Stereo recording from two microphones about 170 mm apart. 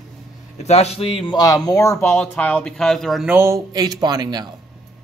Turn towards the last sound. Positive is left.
turn(degrees=-25)  # may be behind; listen again after turning